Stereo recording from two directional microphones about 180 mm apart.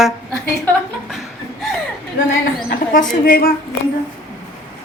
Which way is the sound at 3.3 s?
55° left (ahead or behind).